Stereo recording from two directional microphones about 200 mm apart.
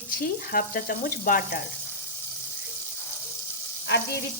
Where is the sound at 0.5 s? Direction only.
45° left (ahead or behind).